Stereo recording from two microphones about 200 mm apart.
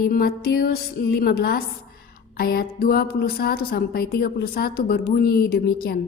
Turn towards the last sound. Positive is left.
turn(degrees=50)  # may be behind; listen again after turning